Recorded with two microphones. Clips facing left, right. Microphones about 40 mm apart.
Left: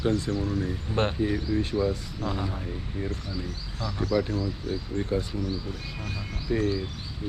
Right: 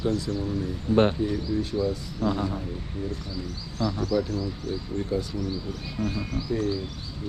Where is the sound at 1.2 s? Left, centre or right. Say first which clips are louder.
Even; left.